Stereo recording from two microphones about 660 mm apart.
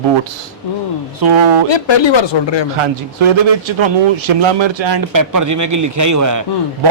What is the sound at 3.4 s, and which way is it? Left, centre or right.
Speech, right.